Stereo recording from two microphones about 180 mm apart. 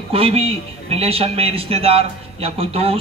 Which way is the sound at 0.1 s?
30° right (ahead or behind).